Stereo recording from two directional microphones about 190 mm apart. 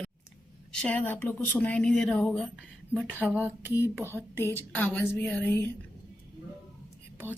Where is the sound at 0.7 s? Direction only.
5° left (ahead or behind).